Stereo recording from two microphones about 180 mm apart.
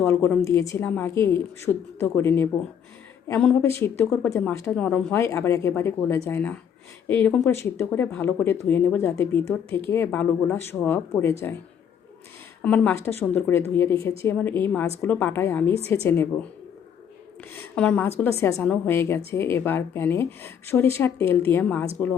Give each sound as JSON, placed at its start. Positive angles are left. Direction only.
{"t": 0.0, "sound": "a woman's voice", "side_deg": 15}
{"t": 12.6, "sound": "a woman's voice", "side_deg": 10}
{"t": 17.5, "sound": "a woman's voice", "side_deg": 10}